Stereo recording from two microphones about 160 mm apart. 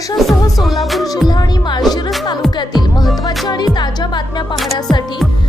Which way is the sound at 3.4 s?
25° left (ahead or behind).